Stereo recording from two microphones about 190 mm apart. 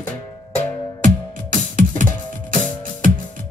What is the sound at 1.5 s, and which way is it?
Music, 45° right (ahead or behind).